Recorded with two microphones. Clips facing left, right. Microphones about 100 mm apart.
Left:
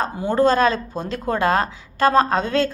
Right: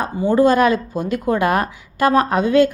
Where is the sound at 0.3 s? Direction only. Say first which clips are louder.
Right 2 dB; 15° right (ahead or behind).